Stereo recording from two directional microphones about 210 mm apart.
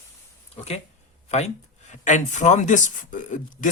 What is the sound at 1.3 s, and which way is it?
Speech, 30° left (ahead or behind).